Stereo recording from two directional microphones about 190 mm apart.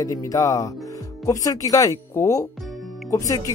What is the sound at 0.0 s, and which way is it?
Speech, 15° left (ahead or behind).